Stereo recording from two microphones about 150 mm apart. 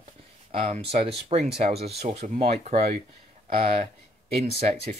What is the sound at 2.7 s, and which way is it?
Speech, 70° right (ahead or behind).